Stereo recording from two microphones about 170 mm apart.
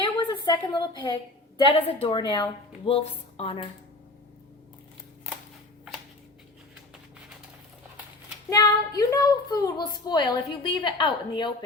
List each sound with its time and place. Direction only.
0.0 s a sound: 25° left (ahead or behind)
1.6 s a woman's voice: 30° left (ahead or behind)
8.4 s a woman's voice: 20° left (ahead or behind)